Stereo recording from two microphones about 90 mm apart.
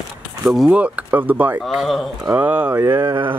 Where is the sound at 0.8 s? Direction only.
15° right (ahead or behind).